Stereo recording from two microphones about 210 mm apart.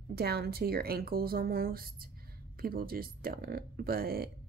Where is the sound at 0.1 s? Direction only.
50° right (ahead or behind).